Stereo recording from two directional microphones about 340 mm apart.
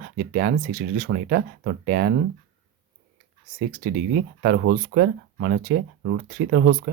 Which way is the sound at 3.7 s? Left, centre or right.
Right.